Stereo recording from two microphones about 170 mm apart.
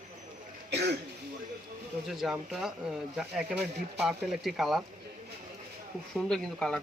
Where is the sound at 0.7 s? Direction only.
80° right.